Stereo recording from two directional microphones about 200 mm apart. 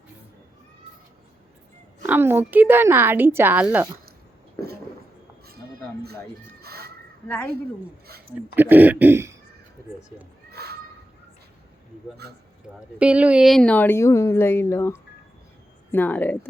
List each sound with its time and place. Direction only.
2.0 s a woman's voice: 10° right (ahead or behind)
6.6 s a sound: 50° right (ahead or behind)
7.3 s a woman's voice: 5° left (ahead or behind)
8.5 s a woman's voice: 10° right (ahead or behind)
10.5 s children playing: 55° right (ahead or behind)
12.7 s a woman's voice: 5° right (ahead or behind)